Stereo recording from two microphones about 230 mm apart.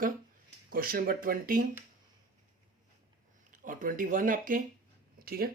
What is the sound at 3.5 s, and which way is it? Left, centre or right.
Speech, right.